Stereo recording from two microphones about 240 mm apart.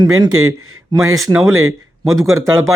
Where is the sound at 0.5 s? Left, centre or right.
Right.